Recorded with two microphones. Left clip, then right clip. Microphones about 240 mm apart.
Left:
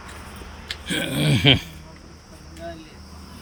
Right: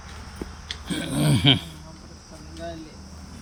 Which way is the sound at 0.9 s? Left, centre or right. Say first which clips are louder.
Left 3 dB; centre.